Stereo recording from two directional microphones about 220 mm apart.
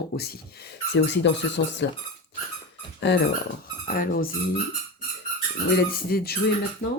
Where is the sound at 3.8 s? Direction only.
40° left (ahead or behind).